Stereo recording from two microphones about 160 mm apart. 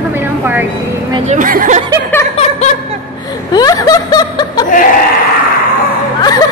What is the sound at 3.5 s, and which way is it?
Snicker, 25° left (ahead or behind).